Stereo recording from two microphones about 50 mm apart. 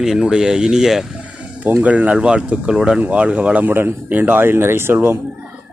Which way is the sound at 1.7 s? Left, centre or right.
Right.